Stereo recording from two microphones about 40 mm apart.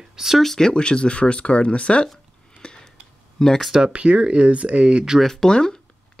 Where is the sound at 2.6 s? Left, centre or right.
Left.